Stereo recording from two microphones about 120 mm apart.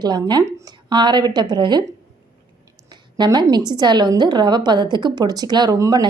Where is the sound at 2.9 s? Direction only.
35° right (ahead or behind).